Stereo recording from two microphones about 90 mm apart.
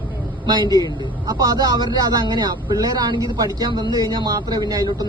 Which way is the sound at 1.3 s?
45° right (ahead or behind).